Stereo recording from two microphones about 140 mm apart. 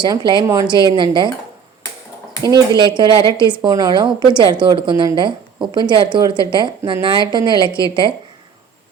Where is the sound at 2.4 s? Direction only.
30° right (ahead or behind).